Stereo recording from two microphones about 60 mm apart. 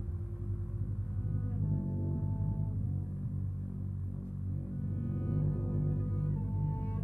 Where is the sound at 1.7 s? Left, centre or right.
Left.